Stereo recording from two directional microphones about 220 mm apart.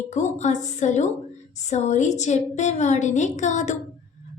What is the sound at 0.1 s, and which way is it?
A woman's voice, 30° left (ahead or behind).